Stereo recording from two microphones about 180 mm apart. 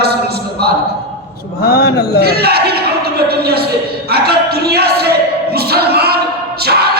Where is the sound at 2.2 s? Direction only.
60° right (ahead or behind).